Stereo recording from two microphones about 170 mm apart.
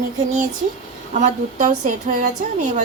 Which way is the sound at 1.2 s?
45° right (ahead or behind).